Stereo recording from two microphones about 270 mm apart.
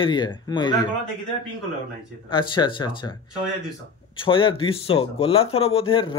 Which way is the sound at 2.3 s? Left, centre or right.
Centre.